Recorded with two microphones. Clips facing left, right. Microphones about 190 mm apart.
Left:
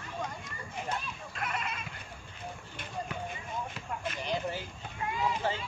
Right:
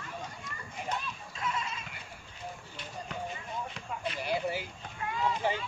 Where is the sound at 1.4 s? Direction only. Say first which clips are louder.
Right 1 dB; 60° left (ahead or behind).